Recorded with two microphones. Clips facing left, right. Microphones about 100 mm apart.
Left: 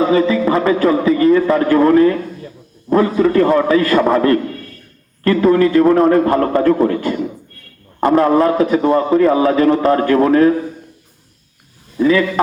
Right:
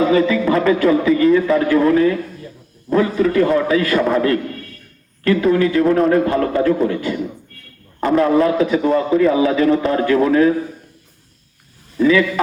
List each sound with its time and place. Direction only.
0.0 s a man's voice: 35° left (ahead or behind)